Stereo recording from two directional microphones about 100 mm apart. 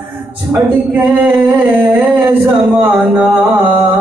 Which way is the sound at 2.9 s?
Centre (ahead or behind).